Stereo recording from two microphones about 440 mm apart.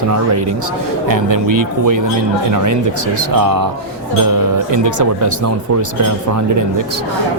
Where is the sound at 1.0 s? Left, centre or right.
Right.